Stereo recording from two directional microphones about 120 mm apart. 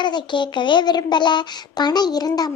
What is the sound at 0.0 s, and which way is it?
Speech, 40° left (ahead or behind).